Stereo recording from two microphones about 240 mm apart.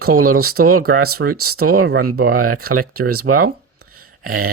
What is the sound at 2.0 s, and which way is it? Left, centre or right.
Speech, right.